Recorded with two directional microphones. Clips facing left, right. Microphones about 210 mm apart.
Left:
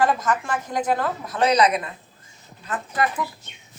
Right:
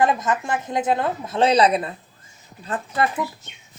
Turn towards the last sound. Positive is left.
turn(degrees=-30)  # may be behind; listen again after turning